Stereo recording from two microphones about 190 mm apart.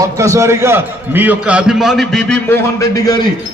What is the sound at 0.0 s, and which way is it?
A man's voice, 15° right (ahead or behind).